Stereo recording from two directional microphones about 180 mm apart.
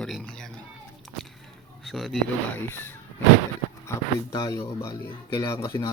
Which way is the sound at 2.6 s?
10° left (ahead or behind).